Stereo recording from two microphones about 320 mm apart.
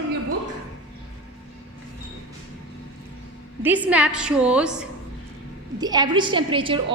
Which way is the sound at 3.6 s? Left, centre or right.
Centre.